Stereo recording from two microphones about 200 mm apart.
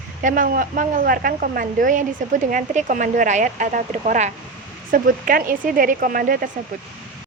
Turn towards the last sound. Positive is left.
turn(degrees=-45)  # may be behind; listen again after turning